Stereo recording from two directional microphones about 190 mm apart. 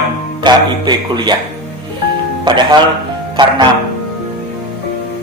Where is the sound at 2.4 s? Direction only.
25° right (ahead or behind).